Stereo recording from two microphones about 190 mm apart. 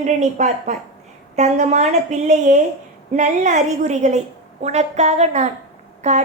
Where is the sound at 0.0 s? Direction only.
40° right (ahead or behind).